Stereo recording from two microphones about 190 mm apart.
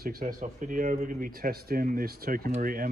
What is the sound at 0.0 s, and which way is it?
Speech, 50° right (ahead or behind).